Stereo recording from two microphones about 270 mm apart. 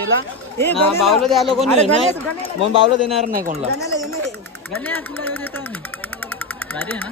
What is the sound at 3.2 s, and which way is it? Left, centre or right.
Speech, right.